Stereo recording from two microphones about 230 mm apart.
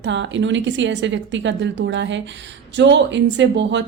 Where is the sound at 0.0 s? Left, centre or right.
Right.